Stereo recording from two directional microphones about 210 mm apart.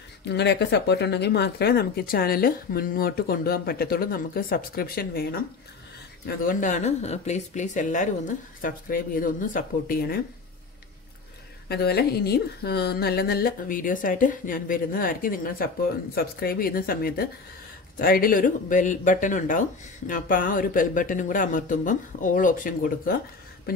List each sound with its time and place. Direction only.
0.2 s speech: 55° left (ahead or behind)
11.7 s speech: 50° left (ahead or behind)